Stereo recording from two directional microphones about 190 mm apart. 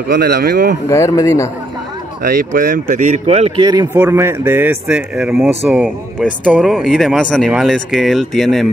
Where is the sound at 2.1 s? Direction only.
50° right (ahead or behind).